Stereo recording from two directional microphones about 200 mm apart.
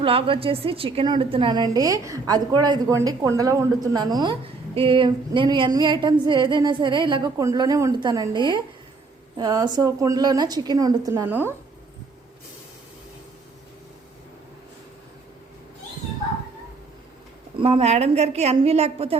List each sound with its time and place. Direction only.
0.0 s a woman's voice: 25° right (ahead or behind); by 11.5 s 10° right (ahead or behind)
17.6 s a woman's voice: 30° right (ahead or behind)